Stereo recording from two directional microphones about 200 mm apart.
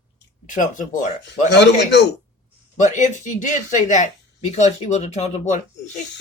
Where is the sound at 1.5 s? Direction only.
60° left (ahead or behind).